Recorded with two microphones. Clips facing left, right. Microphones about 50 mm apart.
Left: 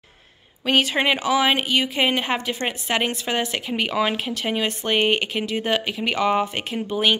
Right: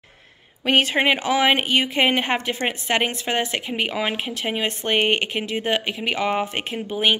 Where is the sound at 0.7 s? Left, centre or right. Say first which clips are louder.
Right 1 dB; right.